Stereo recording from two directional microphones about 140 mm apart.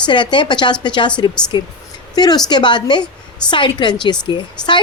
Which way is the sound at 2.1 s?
30° left (ahead or behind).